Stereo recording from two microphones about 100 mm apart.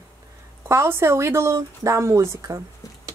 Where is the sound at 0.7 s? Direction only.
25° right (ahead or behind).